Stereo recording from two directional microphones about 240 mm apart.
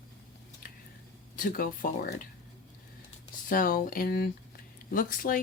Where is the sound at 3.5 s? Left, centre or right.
Left.